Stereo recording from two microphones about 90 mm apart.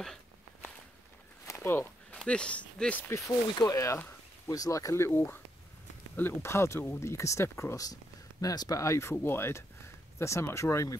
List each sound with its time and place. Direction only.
1.4 s a sound: 30° left (ahead or behind)
2.2 s speech: 10° left (ahead or behind)
3.5 s speech: 40° left (ahead or behind)